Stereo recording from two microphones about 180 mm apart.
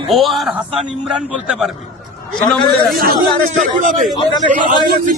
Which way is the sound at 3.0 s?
55° right (ahead or behind).